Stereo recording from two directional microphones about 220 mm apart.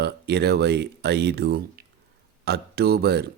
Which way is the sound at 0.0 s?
50° right (ahead or behind).